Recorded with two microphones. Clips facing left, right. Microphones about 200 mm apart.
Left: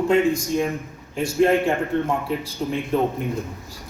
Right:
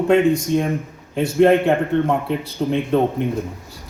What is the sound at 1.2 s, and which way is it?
Speech, 65° right (ahead or behind).